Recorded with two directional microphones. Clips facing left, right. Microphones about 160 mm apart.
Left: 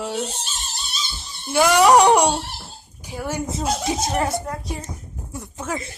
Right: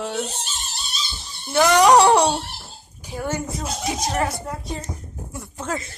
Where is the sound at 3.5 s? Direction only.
25° left (ahead or behind).